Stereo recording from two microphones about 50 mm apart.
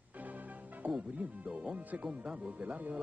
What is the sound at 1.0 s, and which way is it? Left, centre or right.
Speech, right.